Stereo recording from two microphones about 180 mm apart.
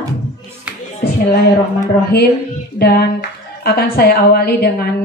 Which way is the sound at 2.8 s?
60° left (ahead or behind).